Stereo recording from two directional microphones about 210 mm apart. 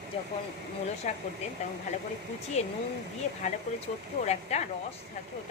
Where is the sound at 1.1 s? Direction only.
35° left (ahead or behind).